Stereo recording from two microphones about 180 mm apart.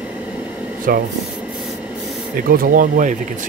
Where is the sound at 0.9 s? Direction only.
50° right (ahead or behind).